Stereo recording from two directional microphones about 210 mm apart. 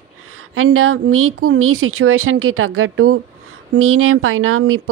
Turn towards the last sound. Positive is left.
turn(degrees=-80)